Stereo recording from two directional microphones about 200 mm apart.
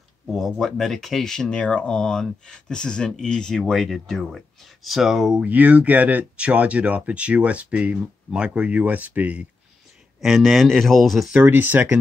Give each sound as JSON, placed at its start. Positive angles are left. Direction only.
{"t": 0.3, "sound": "speech", "side_deg": 0}